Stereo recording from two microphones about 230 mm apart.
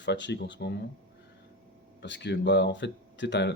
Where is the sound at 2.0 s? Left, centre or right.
Left.